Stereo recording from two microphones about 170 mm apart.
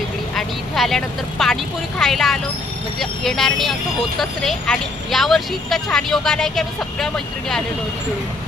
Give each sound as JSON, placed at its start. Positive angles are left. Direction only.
{"t": 0.3, "sound": "speech", "side_deg": 0}